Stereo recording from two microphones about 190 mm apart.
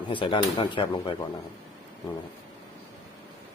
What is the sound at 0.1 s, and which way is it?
Speech, 25° left (ahead or behind).